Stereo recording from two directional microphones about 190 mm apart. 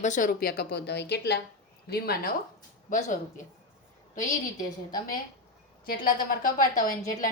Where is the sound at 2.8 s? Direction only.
45° left (ahead or behind).